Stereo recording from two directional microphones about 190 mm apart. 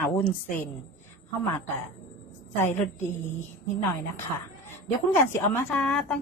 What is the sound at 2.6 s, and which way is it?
Speech, 10° left (ahead or behind).